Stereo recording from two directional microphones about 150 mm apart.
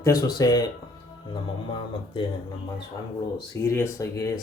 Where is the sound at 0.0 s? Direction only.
25° left (ahead or behind).